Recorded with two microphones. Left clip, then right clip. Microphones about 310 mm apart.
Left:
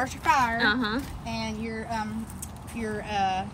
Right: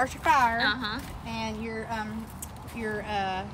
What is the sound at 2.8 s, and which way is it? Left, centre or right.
Speech, centre.